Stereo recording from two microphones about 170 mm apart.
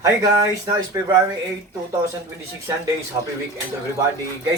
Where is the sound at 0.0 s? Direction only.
20° right (ahead or behind).